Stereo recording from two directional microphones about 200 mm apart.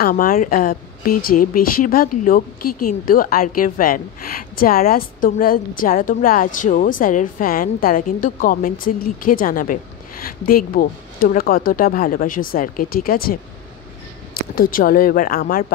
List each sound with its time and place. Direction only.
0.0 s a woman's voice: 45° left (ahead or behind)